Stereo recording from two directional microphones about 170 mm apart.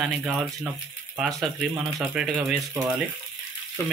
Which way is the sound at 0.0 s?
5° right (ahead or behind).